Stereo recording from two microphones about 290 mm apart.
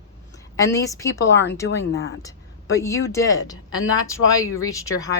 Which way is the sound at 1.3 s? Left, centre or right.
Left.